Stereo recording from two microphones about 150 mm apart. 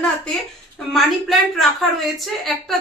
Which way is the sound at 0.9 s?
Centre (ahead or behind).